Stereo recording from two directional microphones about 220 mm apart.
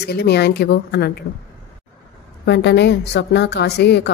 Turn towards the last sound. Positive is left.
turn(degrees=50)  # may be behind; listen again after turning